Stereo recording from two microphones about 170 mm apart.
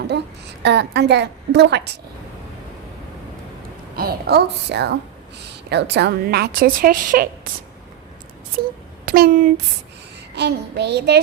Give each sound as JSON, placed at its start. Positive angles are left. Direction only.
{"t": 0.1, "sound": "a woman's voice", "side_deg": -80}
{"t": 3.9, "sound": "a woman's voice", "side_deg": -65}
{"t": 9.0, "sound": "speech", "side_deg": -60}
{"t": 10.3, "sound": "a child's voice", "side_deg": -85}